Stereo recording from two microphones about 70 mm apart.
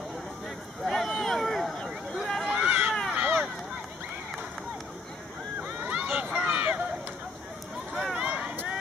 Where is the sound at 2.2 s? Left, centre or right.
Centre.